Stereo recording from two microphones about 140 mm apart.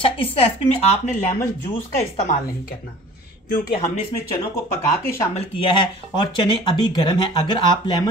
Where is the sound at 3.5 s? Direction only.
90° left.